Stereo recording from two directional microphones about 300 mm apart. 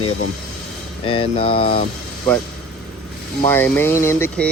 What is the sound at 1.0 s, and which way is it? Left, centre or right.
Speech, centre.